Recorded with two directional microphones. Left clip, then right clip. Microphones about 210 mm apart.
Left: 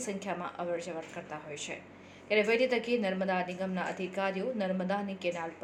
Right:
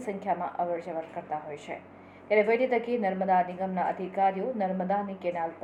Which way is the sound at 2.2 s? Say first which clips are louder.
Right 3 dB; 25° left (ahead or behind).